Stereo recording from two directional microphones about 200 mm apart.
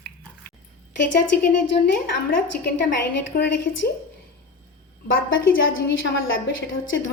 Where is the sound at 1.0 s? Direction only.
55° left (ahead or behind).